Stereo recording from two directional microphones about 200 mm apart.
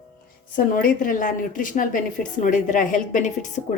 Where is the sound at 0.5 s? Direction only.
45° left (ahead or behind).